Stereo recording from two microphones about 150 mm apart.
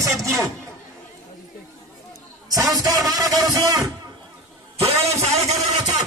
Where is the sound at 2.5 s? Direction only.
25° right (ahead or behind).